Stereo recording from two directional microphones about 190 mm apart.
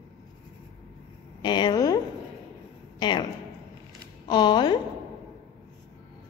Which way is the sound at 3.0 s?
25° left (ahead or behind).